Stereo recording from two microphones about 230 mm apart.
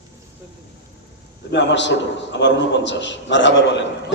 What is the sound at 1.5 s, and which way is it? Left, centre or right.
A man's voice, left.